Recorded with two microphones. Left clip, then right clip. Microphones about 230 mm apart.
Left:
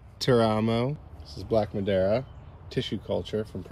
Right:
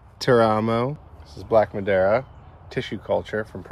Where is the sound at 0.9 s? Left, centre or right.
Centre.